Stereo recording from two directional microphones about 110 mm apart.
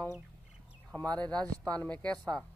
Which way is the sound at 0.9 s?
10° left (ahead or behind).